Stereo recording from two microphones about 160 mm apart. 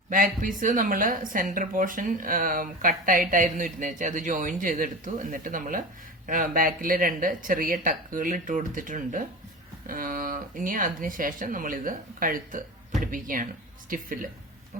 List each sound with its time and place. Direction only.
0.1 s a woman's voice: 55° right (ahead or behind)